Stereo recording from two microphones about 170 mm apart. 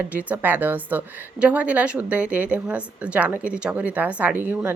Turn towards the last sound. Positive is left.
turn(degrees=-10)  # may be behind; listen again after turning